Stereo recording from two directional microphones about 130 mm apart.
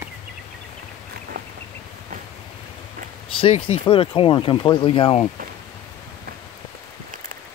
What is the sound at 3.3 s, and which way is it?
Speech, 50° left (ahead or behind).